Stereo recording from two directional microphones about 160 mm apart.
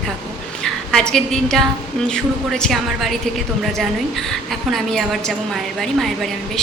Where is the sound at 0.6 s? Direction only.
5° left (ahead or behind).